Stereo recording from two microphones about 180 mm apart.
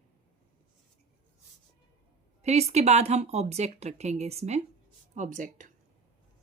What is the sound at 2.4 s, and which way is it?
Speech, 35° right (ahead or behind).